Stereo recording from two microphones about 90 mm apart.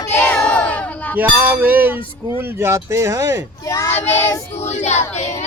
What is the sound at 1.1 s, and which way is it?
Speech, 20° right (ahead or behind).